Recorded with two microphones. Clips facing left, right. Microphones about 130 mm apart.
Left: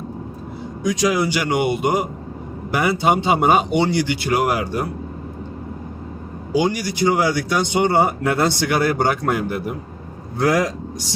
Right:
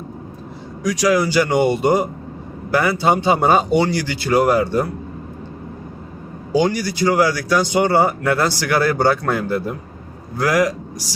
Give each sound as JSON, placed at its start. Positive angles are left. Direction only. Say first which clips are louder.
{"t": 0.8, "sound": "a man's voice", "louder": "right 2 dB", "side_deg": 25}
{"t": 6.6, "sound": "speech", "louder": "right 1 dB", "side_deg": 15}